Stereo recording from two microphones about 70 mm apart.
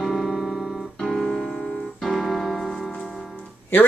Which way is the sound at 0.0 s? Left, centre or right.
Centre.